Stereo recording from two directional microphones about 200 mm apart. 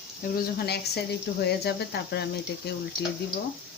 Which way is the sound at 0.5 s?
55° left (ahead or behind).